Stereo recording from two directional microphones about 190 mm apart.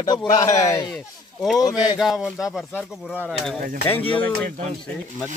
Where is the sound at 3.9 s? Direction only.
30° left (ahead or behind).